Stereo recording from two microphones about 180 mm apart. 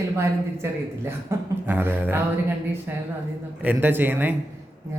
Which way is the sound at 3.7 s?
10° right (ahead or behind).